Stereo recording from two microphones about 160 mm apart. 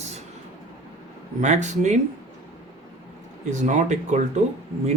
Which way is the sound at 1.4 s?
45° right (ahead or behind).